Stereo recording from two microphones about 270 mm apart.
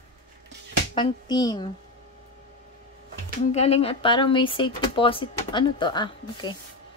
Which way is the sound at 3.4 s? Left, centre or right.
Left.